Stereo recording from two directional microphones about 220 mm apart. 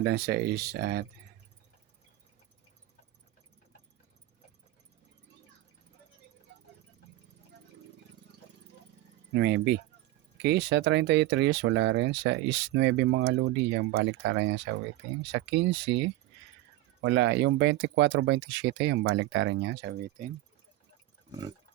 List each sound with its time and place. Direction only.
0.0 s speech: 45° right (ahead or behind)
9.3 s speech: 50° right (ahead or behind)